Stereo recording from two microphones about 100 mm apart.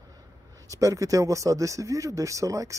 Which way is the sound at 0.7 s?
35° right (ahead or behind).